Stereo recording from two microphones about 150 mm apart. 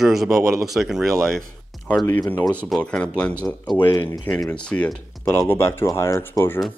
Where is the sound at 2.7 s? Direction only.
5° left (ahead or behind).